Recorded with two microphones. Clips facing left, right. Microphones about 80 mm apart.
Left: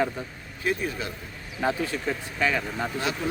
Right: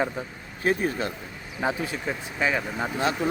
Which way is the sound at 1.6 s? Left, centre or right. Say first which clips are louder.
Left 1 dB; centre.